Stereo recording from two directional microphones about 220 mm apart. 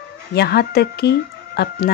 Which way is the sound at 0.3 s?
45° left (ahead or behind).